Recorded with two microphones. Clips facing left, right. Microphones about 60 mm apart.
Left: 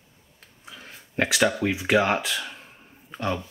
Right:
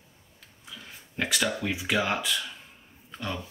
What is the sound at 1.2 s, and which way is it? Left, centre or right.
Speech, left.